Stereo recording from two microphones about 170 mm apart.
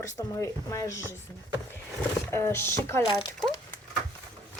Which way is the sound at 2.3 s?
15° left (ahead or behind).